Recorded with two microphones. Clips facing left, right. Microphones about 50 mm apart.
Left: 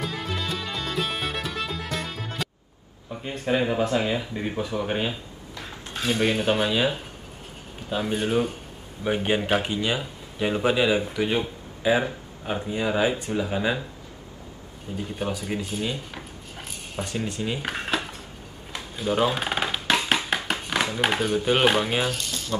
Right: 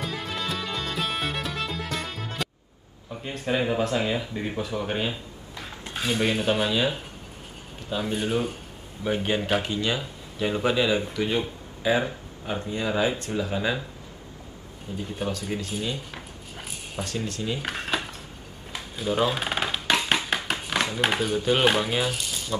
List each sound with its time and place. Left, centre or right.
0.0 s music: centre
3.1 s speech: centre
15.1 s speech: centre
16.2 s a sound: centre
17.0 s speech: centre
17.6 s a sound: centre
21.4 s speech: centre
22.1 s speech: centre